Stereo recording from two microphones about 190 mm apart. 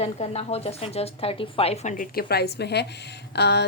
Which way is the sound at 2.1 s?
55° left (ahead or behind).